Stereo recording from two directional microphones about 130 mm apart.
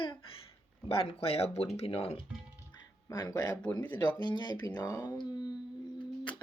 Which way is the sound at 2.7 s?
30° left (ahead or behind).